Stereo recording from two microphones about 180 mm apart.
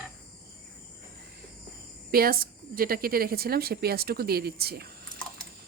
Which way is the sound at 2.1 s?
55° right (ahead or behind).